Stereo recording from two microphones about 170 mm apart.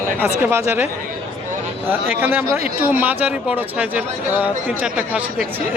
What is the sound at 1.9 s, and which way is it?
Speech, 10° right (ahead or behind).